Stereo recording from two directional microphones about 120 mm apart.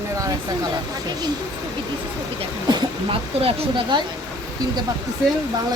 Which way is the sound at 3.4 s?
40° right (ahead or behind).